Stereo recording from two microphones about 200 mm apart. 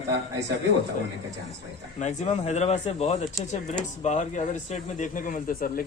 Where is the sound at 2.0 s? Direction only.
35° left (ahead or behind).